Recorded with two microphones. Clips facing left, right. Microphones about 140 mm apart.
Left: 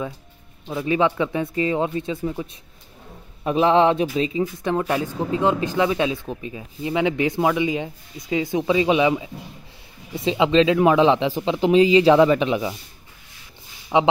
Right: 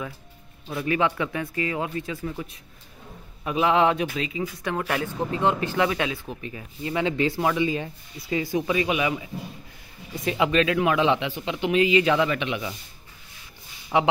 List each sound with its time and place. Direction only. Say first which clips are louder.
0.7 s speech: left 4 dB; 20° left (ahead or behind)
10.8 s speech: left 6 dB; 35° left (ahead or behind)
13.9 s speech: left 3 dB; 15° left (ahead or behind)